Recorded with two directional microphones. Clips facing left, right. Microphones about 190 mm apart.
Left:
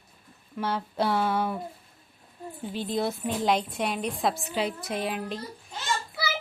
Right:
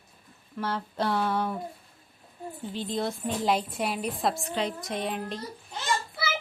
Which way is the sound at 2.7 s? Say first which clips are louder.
Left 2 dB; 5° left (ahead or behind).